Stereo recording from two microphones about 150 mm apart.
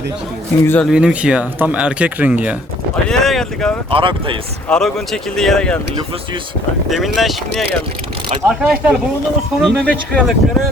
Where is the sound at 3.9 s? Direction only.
35° right (ahead or behind).